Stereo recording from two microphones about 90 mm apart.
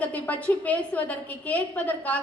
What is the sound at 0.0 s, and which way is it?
A woman's voice, 15° left (ahead or behind).